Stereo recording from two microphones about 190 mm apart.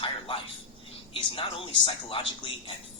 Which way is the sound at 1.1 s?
30° left (ahead or behind).